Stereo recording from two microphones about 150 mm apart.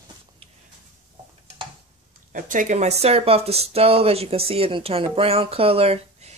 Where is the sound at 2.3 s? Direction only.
60° right (ahead or behind).